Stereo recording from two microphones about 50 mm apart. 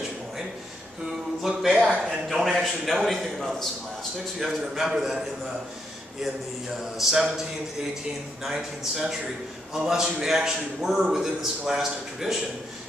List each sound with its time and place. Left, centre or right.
1.4 s a man's voice: centre
4.4 s a man's voice: centre
6.7 s a man's voice: centre
8.5 s a man's voice: centre